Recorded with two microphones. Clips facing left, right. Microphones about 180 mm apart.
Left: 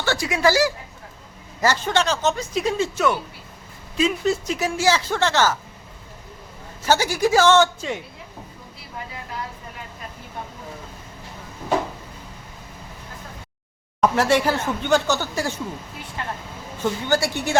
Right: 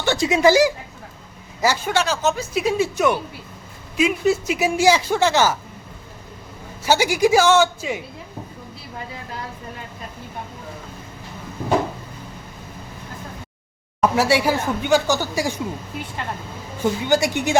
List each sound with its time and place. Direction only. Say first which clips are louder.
0.0 s speech: right 4 dB; 20° right (ahead or behind)
6.8 s speech: right 2 dB; 10° right (ahead or behind)
14.0 s speech: even; 10° right (ahead or behind)
16.8 s speech: right 3 dB; 15° right (ahead or behind)